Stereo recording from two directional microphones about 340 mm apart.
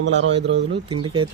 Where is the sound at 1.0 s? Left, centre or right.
Centre.